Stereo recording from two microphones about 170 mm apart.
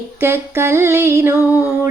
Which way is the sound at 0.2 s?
15° right (ahead or behind).